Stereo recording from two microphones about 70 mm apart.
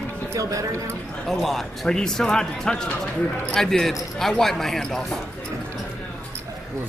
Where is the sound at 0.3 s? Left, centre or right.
Right.